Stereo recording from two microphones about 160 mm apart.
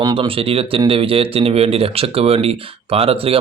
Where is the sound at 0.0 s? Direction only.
35° right (ahead or behind).